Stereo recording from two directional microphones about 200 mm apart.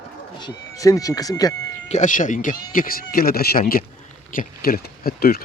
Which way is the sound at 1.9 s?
40° left (ahead or behind).